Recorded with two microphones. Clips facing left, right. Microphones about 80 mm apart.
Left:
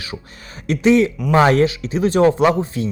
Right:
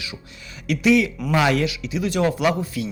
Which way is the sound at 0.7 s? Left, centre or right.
Left.